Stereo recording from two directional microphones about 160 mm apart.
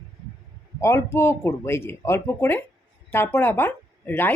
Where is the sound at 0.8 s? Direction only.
15° left (ahead or behind).